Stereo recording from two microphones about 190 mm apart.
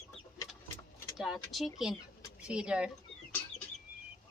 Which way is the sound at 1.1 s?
Centre (ahead or behind).